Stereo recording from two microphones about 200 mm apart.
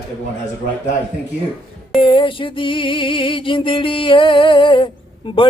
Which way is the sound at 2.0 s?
25° left (ahead or behind).